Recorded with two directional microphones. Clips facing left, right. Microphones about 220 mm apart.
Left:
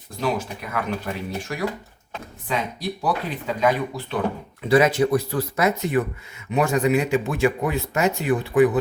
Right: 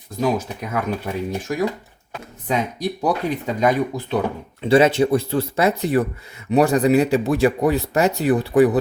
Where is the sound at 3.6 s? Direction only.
45° right (ahead or behind).